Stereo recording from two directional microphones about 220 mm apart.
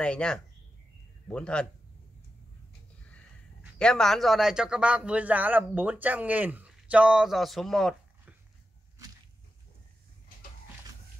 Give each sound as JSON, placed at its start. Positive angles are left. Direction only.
{"t": 0.0, "sound": "a man's voice", "side_deg": 5}
{"t": 3.7, "sound": "a man's voice", "side_deg": 5}